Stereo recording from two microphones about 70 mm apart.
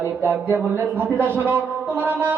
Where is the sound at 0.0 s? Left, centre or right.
Right.